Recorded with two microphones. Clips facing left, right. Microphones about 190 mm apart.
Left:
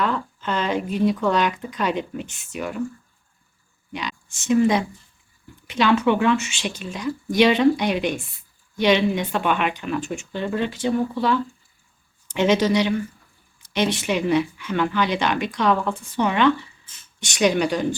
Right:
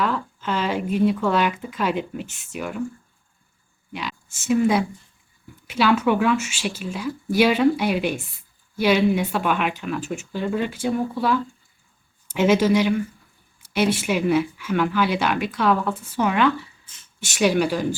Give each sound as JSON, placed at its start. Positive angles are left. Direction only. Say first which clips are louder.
{"t": 0.0, "sound": "speech", "louder": "even", "side_deg": -5}
{"t": 3.9, "sound": "speech", "louder": "left 1 dB", "side_deg": -5}